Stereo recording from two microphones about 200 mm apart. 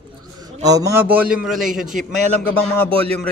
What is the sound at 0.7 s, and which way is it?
A man's voice, 15° right (ahead or behind).